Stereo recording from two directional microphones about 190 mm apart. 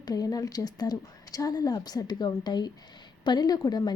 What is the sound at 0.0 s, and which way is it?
Speech, 20° left (ahead or behind).